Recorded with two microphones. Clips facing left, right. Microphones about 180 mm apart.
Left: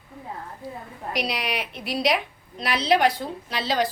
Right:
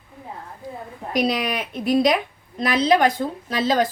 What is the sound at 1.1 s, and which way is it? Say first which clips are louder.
A woman's voice: right 6 dB; 50° right (ahead or behind).